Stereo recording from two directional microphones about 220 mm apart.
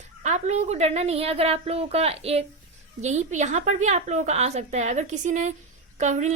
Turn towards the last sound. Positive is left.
turn(degrees=-30)  # may be behind; listen again after turning